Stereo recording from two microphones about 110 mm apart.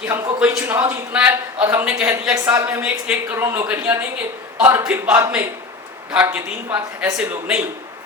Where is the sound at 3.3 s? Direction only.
25° right (ahead or behind).